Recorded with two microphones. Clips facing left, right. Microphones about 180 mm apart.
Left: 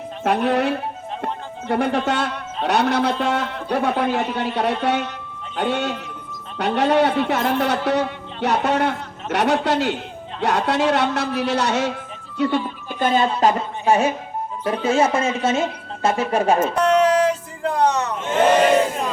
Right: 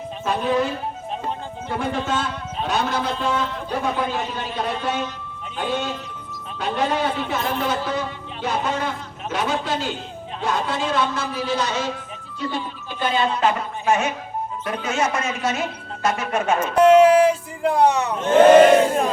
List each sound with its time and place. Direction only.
0.3 s speech: 65° left (ahead or behind); by 16.6 s 35° left (ahead or behind)
16.7 s music: 10° right (ahead or behind)